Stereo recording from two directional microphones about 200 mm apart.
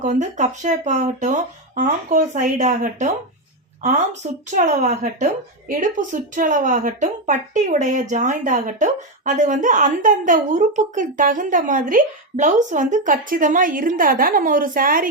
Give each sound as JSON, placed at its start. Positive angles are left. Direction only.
{"t": 0.0, "sound": "a woman's voice", "side_deg": -35}